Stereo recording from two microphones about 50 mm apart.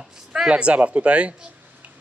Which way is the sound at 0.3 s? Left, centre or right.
Right.